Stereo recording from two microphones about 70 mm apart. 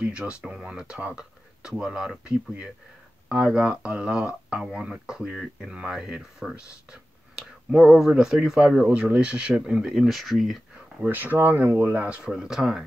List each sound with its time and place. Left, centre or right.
0.0 s speech: centre
11.1 s speech: right
12.3 s speech: centre